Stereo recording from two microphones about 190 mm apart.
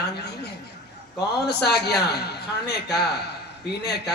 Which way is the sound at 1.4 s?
60° left (ahead or behind).